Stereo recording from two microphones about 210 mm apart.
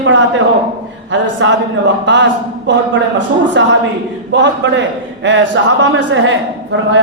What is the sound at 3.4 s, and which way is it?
A man's voice, 60° right (ahead or behind).